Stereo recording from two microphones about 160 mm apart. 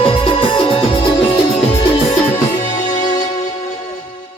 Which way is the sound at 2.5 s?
25° left (ahead or behind).